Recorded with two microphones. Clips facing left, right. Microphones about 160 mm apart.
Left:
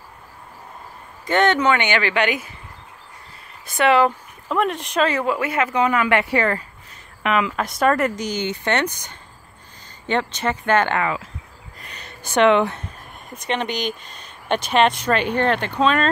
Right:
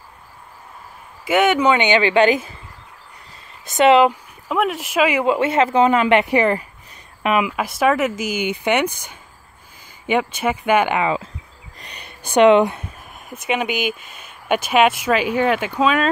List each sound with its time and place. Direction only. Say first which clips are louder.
1.2 s speech: right 2 dB; 5° right (ahead or behind); by 2.5 s 30° right (ahead or behind)
3.6 s speech: right 4 dB; 20° right (ahead or behind)
4.5 s speech: right 1 dB; 5° right (ahead or behind)
5.2 s speech: right 5 dB; 25° right (ahead or behind)
11.8 s a sound: right 1 dB; 15° right (ahead or behind)
13.3 s speech: right 2 dB; 5° right (ahead or behind)